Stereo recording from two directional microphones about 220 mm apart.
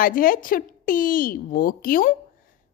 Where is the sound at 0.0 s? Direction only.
40° left (ahead or behind).